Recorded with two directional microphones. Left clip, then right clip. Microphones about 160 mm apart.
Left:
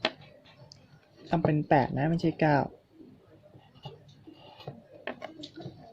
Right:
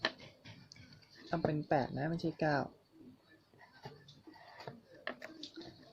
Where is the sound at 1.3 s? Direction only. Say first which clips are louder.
Left 9 dB; 35° left (ahead or behind).